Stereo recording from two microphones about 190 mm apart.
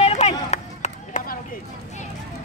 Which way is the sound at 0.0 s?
35° left (ahead or behind).